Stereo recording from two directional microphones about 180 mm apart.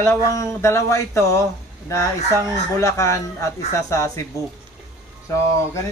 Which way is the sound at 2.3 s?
20° right (ahead or behind).